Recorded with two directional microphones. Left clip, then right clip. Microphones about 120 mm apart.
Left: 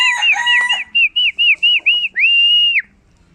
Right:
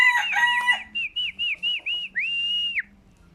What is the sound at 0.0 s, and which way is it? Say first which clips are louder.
Chicken: left 6 dB; 20° left (ahead or behind).